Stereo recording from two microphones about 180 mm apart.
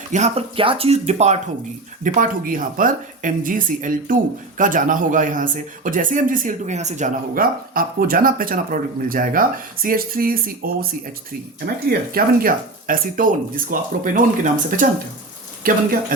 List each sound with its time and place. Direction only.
0.1 s speech: 35° right (ahead or behind)
2.0 s speech: 50° right (ahead or behind)